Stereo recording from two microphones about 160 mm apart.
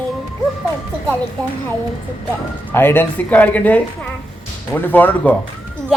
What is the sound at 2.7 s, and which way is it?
A child's voice, 15° left (ahead or behind).